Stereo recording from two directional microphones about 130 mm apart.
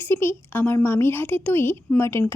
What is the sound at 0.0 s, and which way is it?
A woman's voice, 15° left (ahead or behind).